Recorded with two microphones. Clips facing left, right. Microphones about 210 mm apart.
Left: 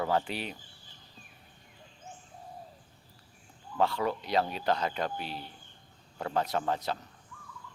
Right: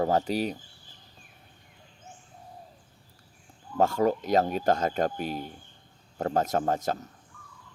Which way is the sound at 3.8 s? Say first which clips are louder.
Right 6 dB; 45° right (ahead or behind).